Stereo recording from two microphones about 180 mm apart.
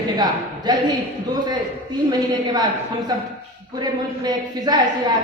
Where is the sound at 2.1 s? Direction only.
20° right (ahead or behind).